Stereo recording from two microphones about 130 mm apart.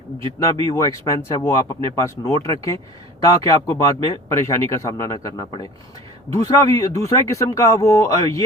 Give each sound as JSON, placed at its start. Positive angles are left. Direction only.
{"t": 0.2, "sound": "speech", "side_deg": -45}
{"t": 0.6, "sound": "speech", "side_deg": 25}
{"t": 6.3, "sound": "speech", "side_deg": 25}